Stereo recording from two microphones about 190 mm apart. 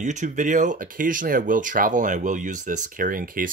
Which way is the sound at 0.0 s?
40° right (ahead or behind).